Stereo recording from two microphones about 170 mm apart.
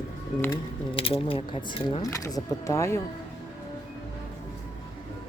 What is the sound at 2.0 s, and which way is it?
Speech, 20° left (ahead or behind).